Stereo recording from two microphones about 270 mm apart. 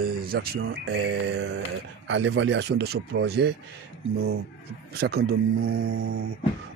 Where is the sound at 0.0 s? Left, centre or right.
Right.